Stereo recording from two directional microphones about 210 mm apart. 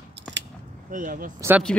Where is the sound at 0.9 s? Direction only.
40° right (ahead or behind).